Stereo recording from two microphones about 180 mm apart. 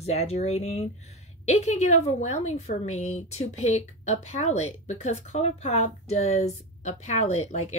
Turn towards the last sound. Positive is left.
turn(degrees=40)  # may be behind; listen again after turning